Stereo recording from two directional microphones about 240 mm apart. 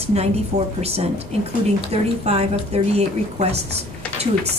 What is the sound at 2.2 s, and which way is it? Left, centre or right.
A woman's voice, right.